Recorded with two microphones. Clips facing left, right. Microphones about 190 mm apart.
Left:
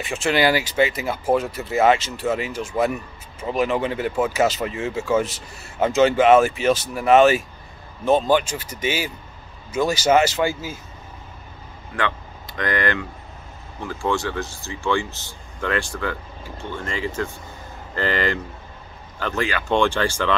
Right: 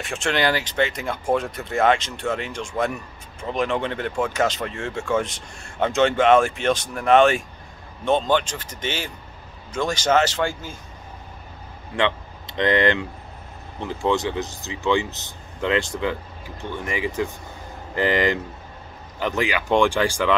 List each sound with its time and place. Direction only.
0.0 s speech: centre (ahead or behind)
11.9 s speech: 25° right (ahead or behind)